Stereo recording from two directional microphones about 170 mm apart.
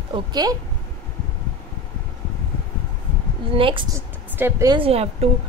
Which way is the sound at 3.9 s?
15° right (ahead or behind).